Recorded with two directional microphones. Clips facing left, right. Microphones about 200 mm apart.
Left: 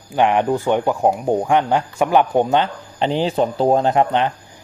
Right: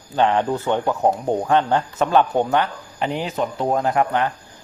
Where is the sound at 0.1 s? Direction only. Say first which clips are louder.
Left 2 dB; 15° left (ahead or behind).